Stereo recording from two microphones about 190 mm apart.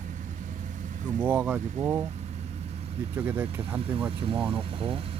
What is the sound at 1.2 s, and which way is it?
Speech, 5° right (ahead or behind).